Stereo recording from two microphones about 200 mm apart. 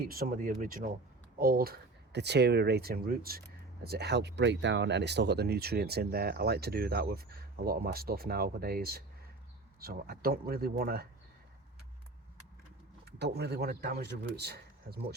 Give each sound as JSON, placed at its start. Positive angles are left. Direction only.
{"t": 0.0, "sound": "speech", "side_deg": -45}
{"t": 13.1, "sound": "speech", "side_deg": -55}